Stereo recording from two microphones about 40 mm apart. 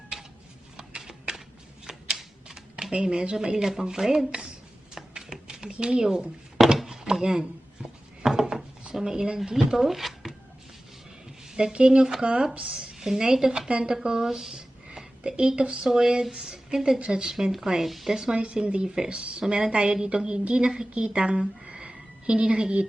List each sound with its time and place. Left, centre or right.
0.8 s a sound: right
1.9 s typewriter: centre
2.9 s speech: right
4.9 s a sound: centre
6.6 s chop: centre
6.9 s a sound: centre
8.3 s wood: centre
8.9 s speech: centre
9.7 s speech: centre
11.5 s speech: right
13.7 s speech: right
13.9 s a woman's voice: centre
18.1 s a woman's voice: centre